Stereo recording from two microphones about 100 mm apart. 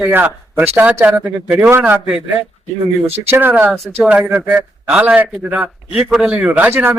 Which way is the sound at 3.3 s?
20° right (ahead or behind).